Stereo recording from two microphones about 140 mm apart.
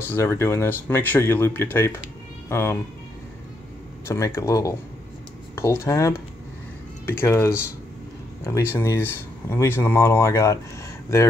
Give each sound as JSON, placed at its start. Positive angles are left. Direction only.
{"t": 0.1, "sound": "speech", "side_deg": 20}
{"t": 4.4, "sound": "speech", "side_deg": 25}